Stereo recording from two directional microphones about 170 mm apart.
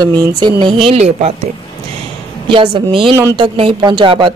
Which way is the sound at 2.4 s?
30° right (ahead or behind).